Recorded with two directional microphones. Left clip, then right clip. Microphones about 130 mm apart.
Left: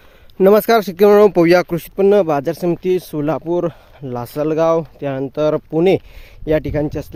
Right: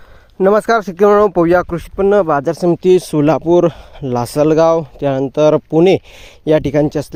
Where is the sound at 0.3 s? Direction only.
15° left (ahead or behind).